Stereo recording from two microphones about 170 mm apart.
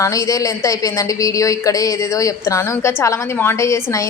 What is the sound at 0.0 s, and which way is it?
A woman's voice, 20° left (ahead or behind).